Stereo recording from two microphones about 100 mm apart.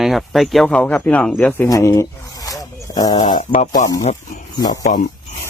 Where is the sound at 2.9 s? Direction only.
40° left (ahead or behind).